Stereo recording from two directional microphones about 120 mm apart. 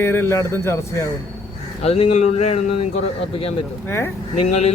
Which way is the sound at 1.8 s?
60° left (ahead or behind).